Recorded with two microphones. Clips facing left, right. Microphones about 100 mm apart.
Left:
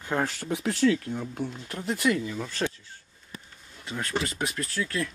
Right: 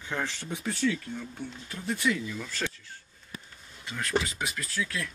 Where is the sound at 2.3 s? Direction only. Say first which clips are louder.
Left 4 dB; 30° left (ahead or behind).